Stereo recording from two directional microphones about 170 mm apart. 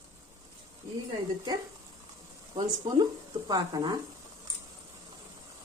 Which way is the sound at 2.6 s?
25° right (ahead or behind).